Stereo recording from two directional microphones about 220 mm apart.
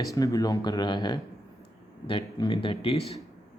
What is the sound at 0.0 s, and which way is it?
Speech, 15° left (ahead or behind).